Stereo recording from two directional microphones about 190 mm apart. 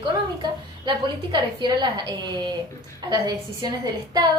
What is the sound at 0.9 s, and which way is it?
A woman's voice, 25° right (ahead or behind).